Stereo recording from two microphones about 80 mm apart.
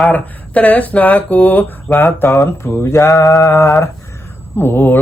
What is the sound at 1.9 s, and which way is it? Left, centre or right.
Mantra, left.